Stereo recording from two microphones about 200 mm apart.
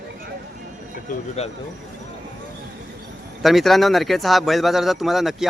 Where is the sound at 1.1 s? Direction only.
40° left (ahead or behind).